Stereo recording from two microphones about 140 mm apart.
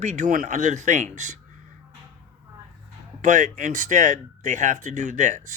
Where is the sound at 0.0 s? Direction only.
60° right (ahead or behind).